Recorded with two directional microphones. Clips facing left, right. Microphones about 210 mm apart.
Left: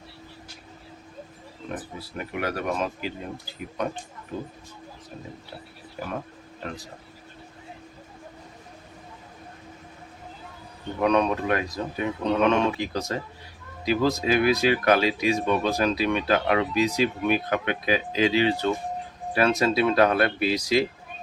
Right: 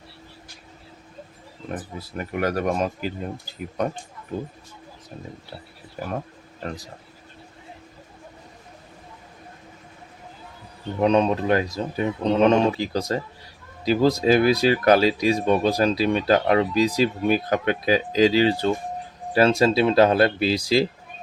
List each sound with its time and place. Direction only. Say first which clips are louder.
2.1 s speech: right 5 dB; 45° right (ahead or behind)
11.0 s speech: right 3 dB; 25° right (ahead or behind)